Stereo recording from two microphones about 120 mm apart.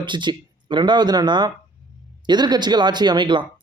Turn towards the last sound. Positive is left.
turn(degrees=-40)  # may be behind; listen again after turning